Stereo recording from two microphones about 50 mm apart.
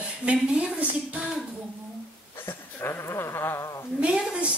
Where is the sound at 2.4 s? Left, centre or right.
Left.